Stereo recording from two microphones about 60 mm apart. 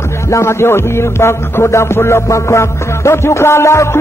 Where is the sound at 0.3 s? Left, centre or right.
Left.